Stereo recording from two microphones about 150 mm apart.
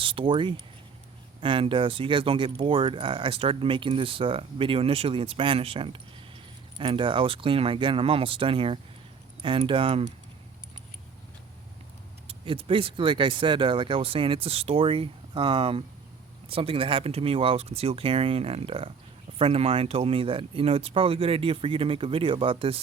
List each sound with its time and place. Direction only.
0.0 s speech: 35° right (ahead or behind)
12.3 s speech: 40° right (ahead or behind)